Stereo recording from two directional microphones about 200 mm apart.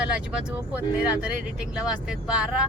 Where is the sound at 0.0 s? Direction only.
5° right (ahead or behind).